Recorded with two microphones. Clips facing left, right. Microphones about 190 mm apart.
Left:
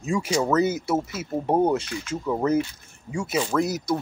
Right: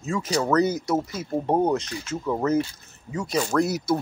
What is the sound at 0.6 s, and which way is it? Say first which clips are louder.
Speech: even; 25° left (ahead or behind).